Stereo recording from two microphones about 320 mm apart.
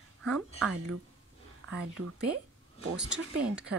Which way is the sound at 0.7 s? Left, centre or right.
Right.